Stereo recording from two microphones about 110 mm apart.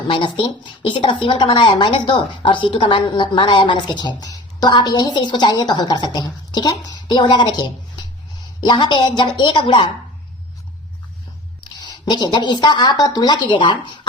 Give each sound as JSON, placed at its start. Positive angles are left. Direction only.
{"t": 0.1, "sound": "a woman's voice", "side_deg": 50}
{"t": 11.8, "sound": "a woman's voice", "side_deg": 40}